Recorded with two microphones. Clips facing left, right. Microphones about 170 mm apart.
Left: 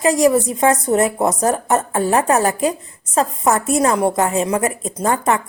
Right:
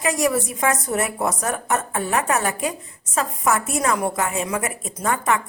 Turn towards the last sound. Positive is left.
turn(degrees=35)  # may be behind; listen again after turning